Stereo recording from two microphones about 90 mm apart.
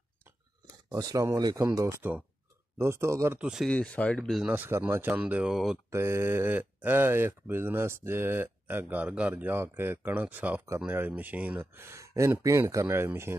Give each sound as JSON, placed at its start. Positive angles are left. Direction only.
{"t": 0.8, "sound": "speech", "side_deg": -45}
{"t": 1.8, "sound": "speech", "side_deg": -25}
{"t": 3.3, "sound": "speech", "side_deg": -10}
{"t": 3.7, "sound": "speech", "side_deg": 15}
{"t": 4.5, "sound": "speech", "side_deg": -25}
{"t": 5.1, "sound": "speech", "side_deg": -15}
{"t": 5.9, "sound": "speech", "side_deg": -30}